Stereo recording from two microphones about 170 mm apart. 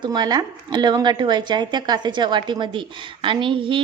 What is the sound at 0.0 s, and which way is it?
Speech, 25° right (ahead or behind).